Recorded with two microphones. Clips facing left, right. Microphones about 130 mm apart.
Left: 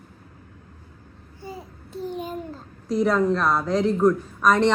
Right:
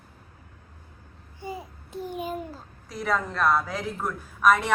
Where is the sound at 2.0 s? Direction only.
10° right (ahead or behind).